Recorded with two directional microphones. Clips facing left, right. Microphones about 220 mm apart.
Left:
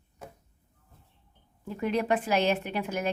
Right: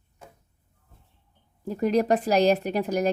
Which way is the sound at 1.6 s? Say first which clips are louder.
Right 5 dB; 40° right (ahead or behind).